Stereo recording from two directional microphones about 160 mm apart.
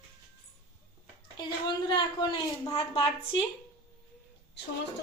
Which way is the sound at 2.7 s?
35° left (ahead or behind).